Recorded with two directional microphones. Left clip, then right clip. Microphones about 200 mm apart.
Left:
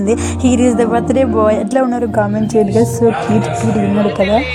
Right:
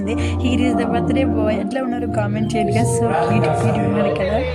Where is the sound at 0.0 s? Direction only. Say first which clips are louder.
Left 7 dB; 20° left (ahead or behind).